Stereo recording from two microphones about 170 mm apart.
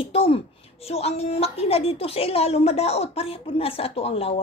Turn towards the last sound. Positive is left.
turn(degrees=35)  # may be behind; listen again after turning